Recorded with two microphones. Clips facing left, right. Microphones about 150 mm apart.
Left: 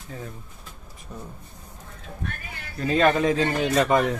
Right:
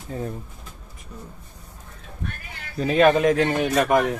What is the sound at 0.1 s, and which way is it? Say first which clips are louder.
Speech: right 7 dB; 35° right (ahead or behind).